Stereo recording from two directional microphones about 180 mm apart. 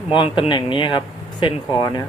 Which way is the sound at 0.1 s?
25° left (ahead or behind).